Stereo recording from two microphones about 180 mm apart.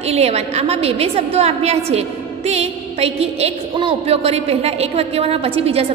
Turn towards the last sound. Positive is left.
turn(degrees=-30)  # may be behind; listen again after turning